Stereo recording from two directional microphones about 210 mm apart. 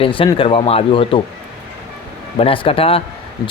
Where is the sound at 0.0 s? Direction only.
25° left (ahead or behind).